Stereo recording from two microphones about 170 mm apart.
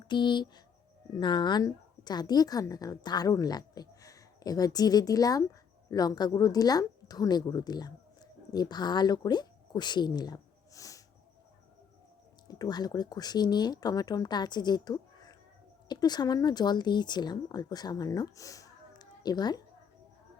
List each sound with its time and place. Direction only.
0.1 s a woman's voice: 25° left (ahead or behind)
12.5 s speech: 25° left (ahead or behind)